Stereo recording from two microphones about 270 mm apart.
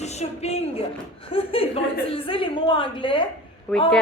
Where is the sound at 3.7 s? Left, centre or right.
Centre.